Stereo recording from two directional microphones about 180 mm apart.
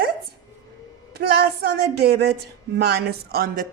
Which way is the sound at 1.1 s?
65° right (ahead or behind).